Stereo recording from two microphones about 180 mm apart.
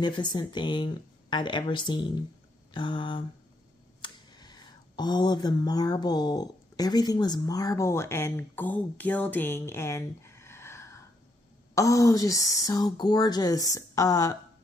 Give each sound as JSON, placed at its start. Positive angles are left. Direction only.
{"t": 0.0, "sound": "speech", "side_deg": 25}